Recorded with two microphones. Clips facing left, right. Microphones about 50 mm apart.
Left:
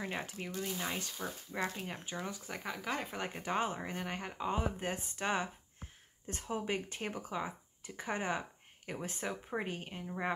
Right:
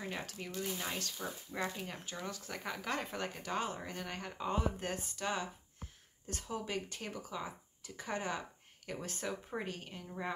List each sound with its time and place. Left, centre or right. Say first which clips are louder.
0.0 s speech: left 2 dB; centre
2.6 s speech: even; centre
3.3 s speech: left 6 dB; left